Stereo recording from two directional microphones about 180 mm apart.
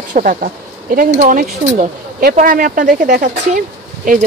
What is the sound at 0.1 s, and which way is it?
Speech, 45° right (ahead or behind).